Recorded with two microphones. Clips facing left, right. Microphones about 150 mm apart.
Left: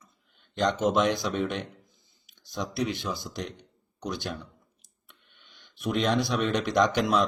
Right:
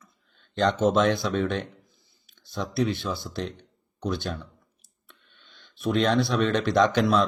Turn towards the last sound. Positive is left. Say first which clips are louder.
# right 3 dB
turn(degrees=15)  # may be behind; listen again after turning